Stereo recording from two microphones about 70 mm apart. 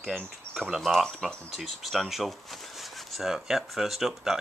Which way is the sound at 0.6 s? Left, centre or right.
Centre.